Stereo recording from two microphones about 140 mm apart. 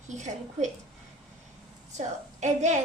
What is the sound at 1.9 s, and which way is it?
Speech, 60° right (ahead or behind).